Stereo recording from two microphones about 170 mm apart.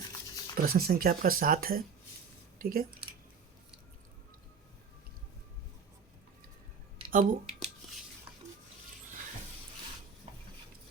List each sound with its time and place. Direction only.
0.5 s speech: 60° right (ahead or behind)
7.1 s speech: 55° right (ahead or behind)
10.3 s cutlery: 35° right (ahead or behind)